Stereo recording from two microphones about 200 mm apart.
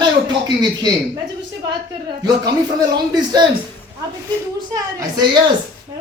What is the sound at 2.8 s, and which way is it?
Speech, 20° right (ahead or behind).